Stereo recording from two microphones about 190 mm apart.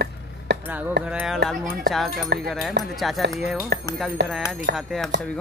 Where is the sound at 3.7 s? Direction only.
60° right (ahead or behind).